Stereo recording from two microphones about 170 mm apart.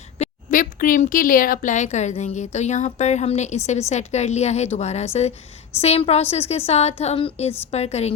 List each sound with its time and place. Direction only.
0.2 s a woman's voice: 50° left (ahead or behind)